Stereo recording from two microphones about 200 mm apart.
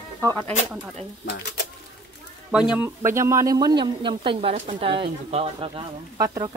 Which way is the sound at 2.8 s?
10° right (ahead or behind).